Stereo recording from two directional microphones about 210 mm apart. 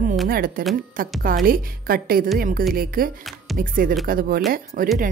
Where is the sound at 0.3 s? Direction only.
45° right (ahead or behind).